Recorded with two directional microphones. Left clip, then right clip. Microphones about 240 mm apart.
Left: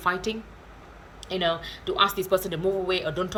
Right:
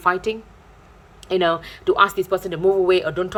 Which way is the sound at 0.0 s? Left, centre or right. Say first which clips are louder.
Right 6 dB; centre.